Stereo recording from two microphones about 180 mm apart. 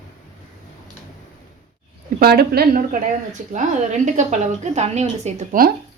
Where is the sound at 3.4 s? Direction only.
45° right (ahead or behind).